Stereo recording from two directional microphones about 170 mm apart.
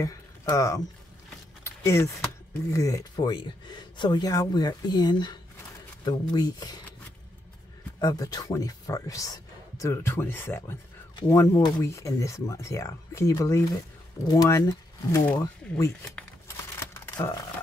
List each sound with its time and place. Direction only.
0.0 s speech: 20° left (ahead or behind)
1.9 s speech: 15° left (ahead or behind)
8.0 s speech: 20° left (ahead or behind)
16.2 s crumpling: 15° left (ahead or behind)